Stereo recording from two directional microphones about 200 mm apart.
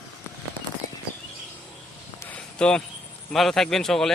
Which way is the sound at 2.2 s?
5° left (ahead or behind).